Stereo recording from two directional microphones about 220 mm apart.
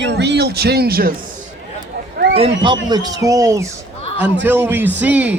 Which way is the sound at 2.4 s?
25° right (ahead or behind).